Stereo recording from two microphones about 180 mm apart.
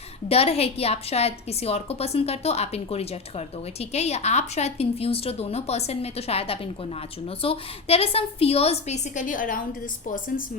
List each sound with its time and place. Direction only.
0.3 s a woman's voice: 35° left (ahead or behind)